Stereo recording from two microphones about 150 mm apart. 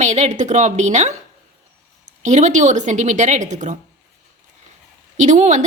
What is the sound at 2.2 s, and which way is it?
Speech, 50° right (ahead or behind).